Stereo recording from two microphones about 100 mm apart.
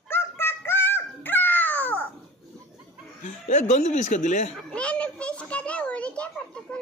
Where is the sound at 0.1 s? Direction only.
25° left (ahead or behind).